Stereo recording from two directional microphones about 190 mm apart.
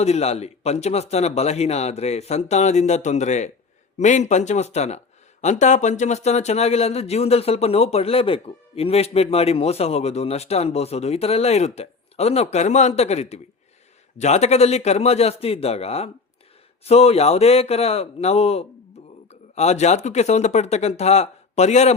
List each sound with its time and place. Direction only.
0.0 s speech: 35° left (ahead or behind)